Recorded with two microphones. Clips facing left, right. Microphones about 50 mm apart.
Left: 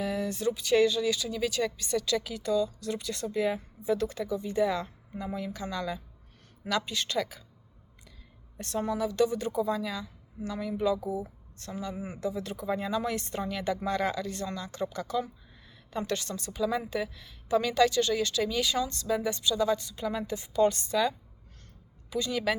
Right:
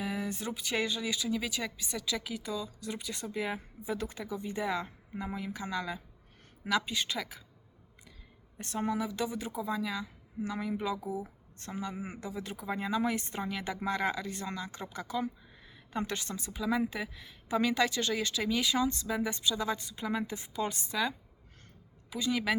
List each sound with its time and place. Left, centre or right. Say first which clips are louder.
0.0 s a woman's voice: left 6 dB; centre
8.5 s a woman's voice: left 2 dB; centre